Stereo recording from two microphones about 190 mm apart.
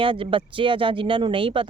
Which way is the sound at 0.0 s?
25° right (ahead or behind).